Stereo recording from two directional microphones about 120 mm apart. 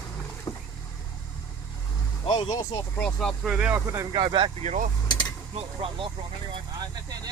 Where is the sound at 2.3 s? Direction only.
35° left (ahead or behind).